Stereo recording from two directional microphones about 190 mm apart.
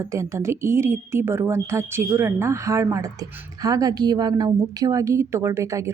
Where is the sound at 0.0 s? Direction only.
15° right (ahead or behind).